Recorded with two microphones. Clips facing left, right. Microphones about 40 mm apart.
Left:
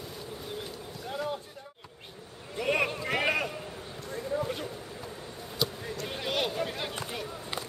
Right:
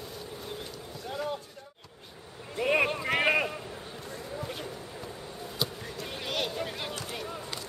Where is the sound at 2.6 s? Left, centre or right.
Centre.